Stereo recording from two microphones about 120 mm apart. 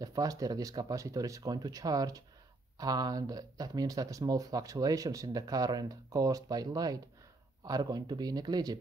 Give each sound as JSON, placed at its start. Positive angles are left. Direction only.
{"t": 0.0, "sound": "speech", "side_deg": -30}